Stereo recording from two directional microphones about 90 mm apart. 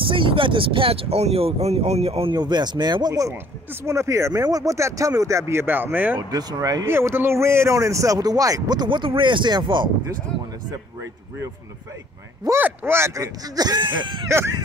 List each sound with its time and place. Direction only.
0.0 s speech: 75° right (ahead or behind); by 2.3 s 90° right
2.3 s speech: 55° right (ahead or behind)
3.8 s speech: 35° right (ahead or behind)
6.1 s speech: 45° right (ahead or behind)
6.9 s speech: 25° right (ahead or behind); by 9.8 s 60° right (ahead or behind)
12.5 s speech: 25° right (ahead or behind); by 14.2 s 60° right (ahead or behind)